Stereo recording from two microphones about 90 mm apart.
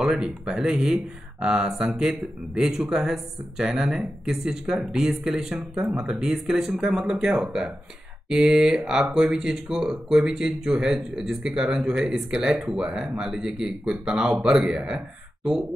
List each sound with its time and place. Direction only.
0.0 s speech: 10° right (ahead or behind)